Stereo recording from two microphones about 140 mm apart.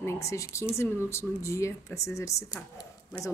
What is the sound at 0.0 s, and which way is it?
Speech, 20° left (ahead or behind).